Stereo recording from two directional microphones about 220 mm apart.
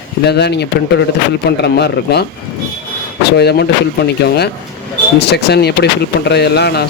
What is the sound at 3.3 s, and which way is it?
Speech, 50° left (ahead or behind).